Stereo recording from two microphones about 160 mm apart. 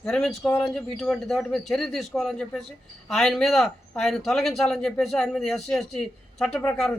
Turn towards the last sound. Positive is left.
turn(degrees=5)  # may be behind; listen again after turning